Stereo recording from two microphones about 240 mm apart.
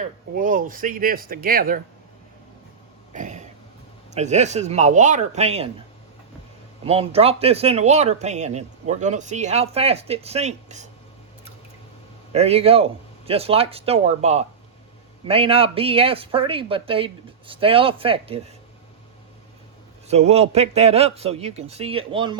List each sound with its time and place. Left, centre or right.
0.0 s speech: right
3.2 s throat clearing: right
4.1 s speech: right
6.8 s speech: right
12.3 s speech: right
20.1 s speech: right